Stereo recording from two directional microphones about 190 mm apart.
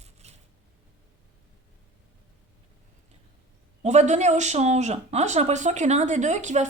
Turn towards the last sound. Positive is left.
turn(degrees=-40)  # may be behind; listen again after turning